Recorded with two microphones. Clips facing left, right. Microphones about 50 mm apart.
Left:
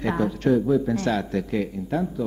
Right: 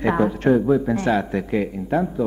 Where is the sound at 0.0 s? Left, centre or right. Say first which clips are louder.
Right 4 dB; right.